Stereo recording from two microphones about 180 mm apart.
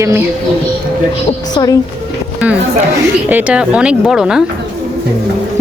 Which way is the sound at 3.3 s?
5° right (ahead or behind).